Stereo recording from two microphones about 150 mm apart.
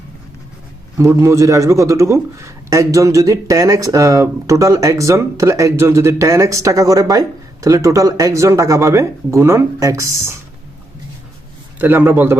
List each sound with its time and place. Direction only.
0.9 s speech: 20° right (ahead or behind)
11.8 s a man's voice: 10° right (ahead or behind)